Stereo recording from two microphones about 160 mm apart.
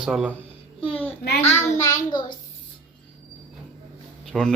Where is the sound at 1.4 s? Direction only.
45° left (ahead or behind).